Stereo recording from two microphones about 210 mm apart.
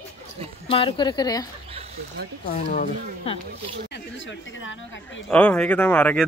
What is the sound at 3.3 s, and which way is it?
Speech, 30° left (ahead or behind).